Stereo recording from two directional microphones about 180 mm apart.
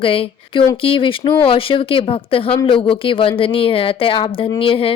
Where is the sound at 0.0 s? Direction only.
30° left (ahead or behind).